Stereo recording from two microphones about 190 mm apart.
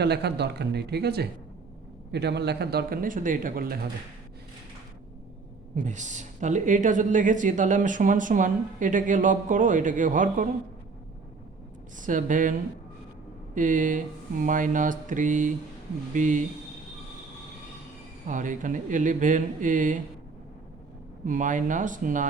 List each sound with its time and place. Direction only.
0.0 s speech: 60° right (ahead or behind)
5.7 s speech: 40° right (ahead or behind)
11.9 s speech: 45° right (ahead or behind)
18.3 s speech: 45° right (ahead or behind)
21.2 s speech: 40° right (ahead or behind)